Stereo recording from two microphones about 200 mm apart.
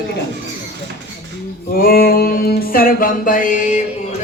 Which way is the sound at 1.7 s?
45° left (ahead or behind).